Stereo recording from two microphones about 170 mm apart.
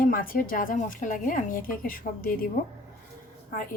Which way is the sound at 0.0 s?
55° left (ahead or behind).